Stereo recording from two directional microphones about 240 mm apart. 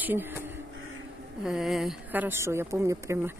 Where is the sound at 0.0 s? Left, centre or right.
Centre.